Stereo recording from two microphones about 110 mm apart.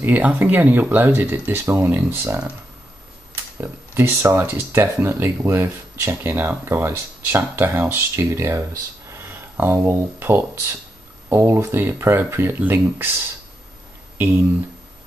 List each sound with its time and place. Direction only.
0.0 s speech: 15° right (ahead or behind)
3.6 s speech: 25° right (ahead or behind)
14.1 s speech: 20° right (ahead or behind)